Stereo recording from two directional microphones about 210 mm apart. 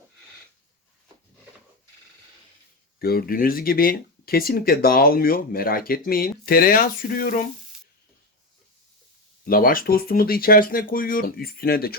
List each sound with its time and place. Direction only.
3.0 s speech: 45° left (ahead or behind)
9.5 s speech: 40° left (ahead or behind)